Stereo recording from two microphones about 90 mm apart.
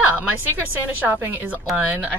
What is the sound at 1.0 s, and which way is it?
Speech, 20° right (ahead or behind).